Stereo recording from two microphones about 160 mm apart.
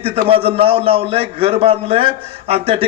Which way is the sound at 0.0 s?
40° right (ahead or behind).